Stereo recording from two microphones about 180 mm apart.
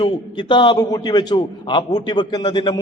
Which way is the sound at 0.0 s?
25° left (ahead or behind).